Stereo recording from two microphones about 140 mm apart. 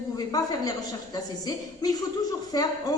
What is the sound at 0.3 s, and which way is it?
A woman's voice, 25° left (ahead or behind).